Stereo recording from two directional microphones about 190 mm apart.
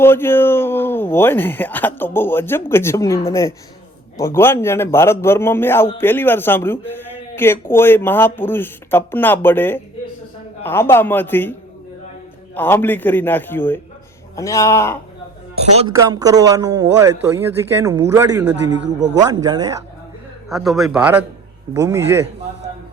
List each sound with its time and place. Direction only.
0.0 s a man's voice: 10° left (ahead or behind)
12.5 s a man's voice: 10° left (ahead or behind)
15.9 s a man's voice: 15° right (ahead or behind)
20.5 s a man's voice: centre (ahead or behind); by 22.0 s 15° right (ahead or behind)